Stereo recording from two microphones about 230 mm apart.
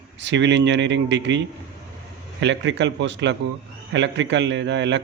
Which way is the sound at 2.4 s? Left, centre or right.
Right.